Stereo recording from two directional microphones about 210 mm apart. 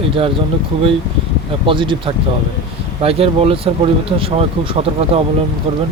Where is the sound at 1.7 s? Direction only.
25° right (ahead or behind).